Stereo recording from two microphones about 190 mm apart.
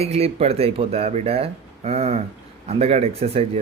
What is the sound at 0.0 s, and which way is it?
Speech, 30° right (ahead or behind).